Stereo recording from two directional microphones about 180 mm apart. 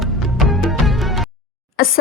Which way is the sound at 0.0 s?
Centre (ahead or behind).